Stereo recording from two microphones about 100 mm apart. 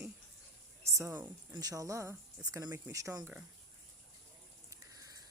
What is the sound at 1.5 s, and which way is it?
Speech, 35° right (ahead or behind).